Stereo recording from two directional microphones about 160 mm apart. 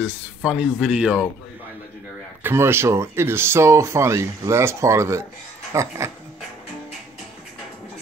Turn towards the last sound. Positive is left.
turn(degrees=-20)  # may be behind; listen again after turning